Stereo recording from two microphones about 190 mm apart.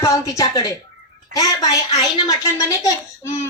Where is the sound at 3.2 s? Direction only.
15° left (ahead or behind).